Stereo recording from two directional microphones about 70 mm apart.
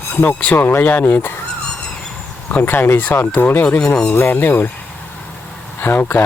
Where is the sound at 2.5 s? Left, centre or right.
Left.